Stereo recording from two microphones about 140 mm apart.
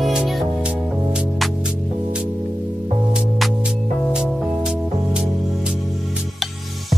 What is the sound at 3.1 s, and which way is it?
Music, 5° right (ahead or behind).